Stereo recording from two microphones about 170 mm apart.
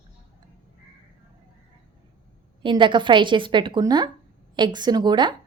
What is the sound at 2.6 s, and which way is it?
A woman's voice, 30° right (ahead or behind).